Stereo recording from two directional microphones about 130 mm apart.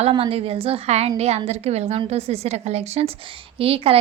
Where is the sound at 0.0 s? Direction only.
45° right (ahead or behind).